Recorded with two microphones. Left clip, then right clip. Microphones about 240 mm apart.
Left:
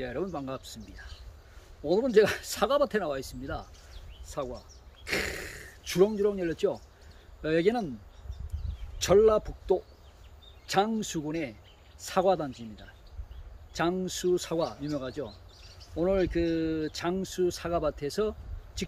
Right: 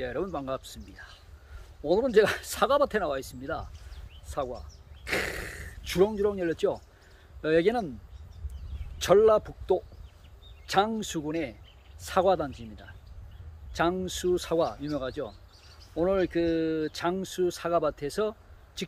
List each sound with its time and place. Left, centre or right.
0.0 s speech: centre
8.9 s speech: centre
13.7 s speech: centre